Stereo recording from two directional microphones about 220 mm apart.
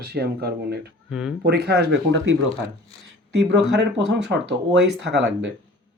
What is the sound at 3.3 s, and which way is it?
Speech, 50° right (ahead or behind).